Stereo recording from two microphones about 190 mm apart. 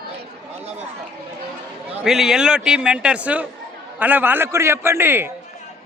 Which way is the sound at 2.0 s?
Centre (ahead or behind).